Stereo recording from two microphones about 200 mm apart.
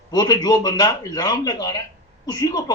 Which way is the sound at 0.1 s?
20° left (ahead or behind).